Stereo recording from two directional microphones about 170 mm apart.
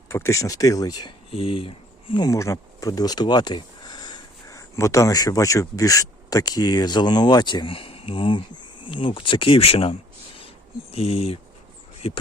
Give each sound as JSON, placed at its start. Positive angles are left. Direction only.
{"t": 0.1, "sound": "speech", "side_deg": 15}
{"t": 10.9, "sound": "speech", "side_deg": 35}